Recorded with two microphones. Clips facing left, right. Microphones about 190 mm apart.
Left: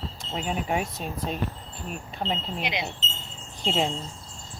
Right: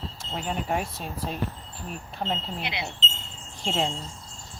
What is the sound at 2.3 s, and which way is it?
Speech, 15° left (ahead or behind).